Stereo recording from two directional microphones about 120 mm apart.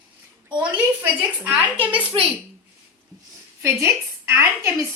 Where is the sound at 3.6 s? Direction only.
20° right (ahead or behind).